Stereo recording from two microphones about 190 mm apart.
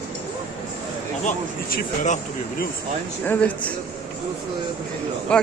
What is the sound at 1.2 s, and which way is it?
Speech, 45° left (ahead or behind).